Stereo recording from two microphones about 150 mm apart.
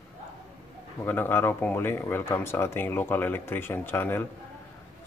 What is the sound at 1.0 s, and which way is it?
Speech, 15° left (ahead or behind).